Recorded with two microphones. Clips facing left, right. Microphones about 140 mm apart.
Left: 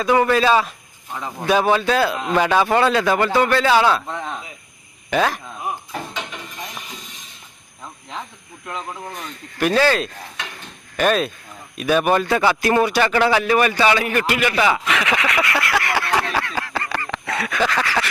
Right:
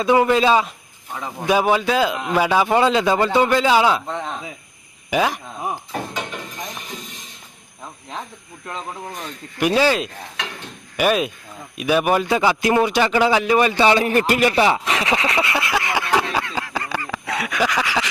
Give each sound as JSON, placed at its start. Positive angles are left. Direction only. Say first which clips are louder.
{"t": 0.0, "sound": "a man's voice", "louder": "right 1 dB", "side_deg": -20}
{"t": 9.6, "sound": "a man's voice", "louder": "even", "side_deg": -15}